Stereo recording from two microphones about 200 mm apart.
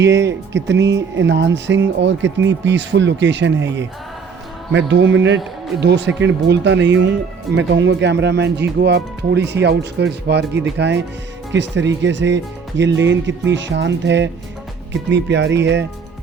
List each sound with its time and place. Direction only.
0.0 s speech: 65° right (ahead or behind)